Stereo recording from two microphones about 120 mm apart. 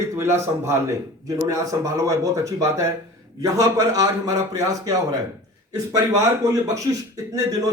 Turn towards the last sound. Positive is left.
turn(degrees=-30)  # may be behind; listen again after turning